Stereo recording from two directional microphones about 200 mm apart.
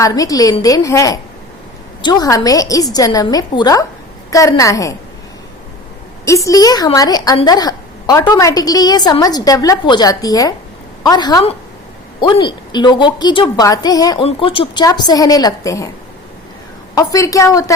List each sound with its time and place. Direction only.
0.0 s a woman's voice: 20° left (ahead or behind)
6.2 s a woman's voice: 15° left (ahead or behind)
16.9 s a woman's voice: 20° left (ahead or behind)